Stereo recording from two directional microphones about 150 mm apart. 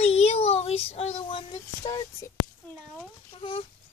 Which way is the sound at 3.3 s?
35° left (ahead or behind).